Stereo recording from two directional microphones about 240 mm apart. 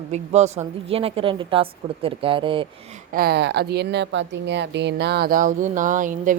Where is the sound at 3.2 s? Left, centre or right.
Right.